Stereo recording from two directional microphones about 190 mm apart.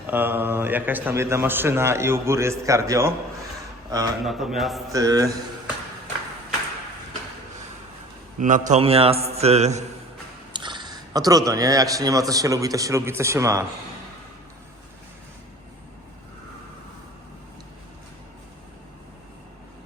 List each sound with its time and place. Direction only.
0.1 s a man's voice: 10° right (ahead or behind)
3.9 s mantra: 20° right (ahead or behind)
4.3 s speech: centre (ahead or behind)
4.9 s mantra: 20° right (ahead or behind)
8.4 s a man's voice: 40° right (ahead or behind)
10.5 s a man's voice: 25° right (ahead or behind)